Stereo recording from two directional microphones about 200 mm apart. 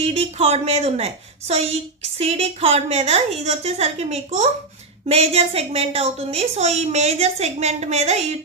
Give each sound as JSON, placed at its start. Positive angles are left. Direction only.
{"t": 0.0, "sound": "a woman's voice", "side_deg": -30}